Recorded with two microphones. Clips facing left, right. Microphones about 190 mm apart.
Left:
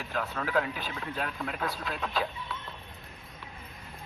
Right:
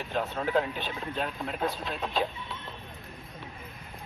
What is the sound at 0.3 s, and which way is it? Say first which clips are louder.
Speech: right 1 dB; 25° right (ahead or behind).